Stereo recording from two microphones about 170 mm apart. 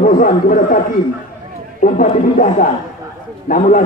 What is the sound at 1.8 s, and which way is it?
A man's voice, 50° left (ahead or behind).